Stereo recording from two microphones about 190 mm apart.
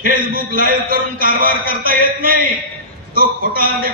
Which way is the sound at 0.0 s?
50° right (ahead or behind).